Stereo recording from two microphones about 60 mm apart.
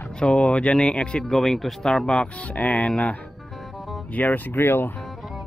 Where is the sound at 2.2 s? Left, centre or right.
Left.